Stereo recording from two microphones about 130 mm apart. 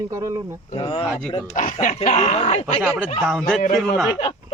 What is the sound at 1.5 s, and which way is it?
Speech, 80° left.